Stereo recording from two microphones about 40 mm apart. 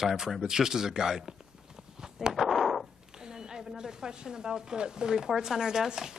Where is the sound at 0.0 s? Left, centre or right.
Centre.